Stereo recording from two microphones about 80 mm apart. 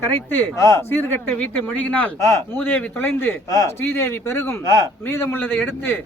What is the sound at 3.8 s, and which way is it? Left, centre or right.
Speech, left.